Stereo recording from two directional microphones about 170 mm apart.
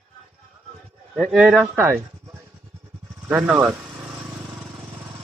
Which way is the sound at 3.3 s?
5° right (ahead or behind).